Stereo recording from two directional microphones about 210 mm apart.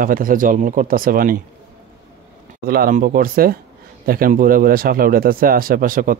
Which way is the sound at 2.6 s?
45° right (ahead or behind).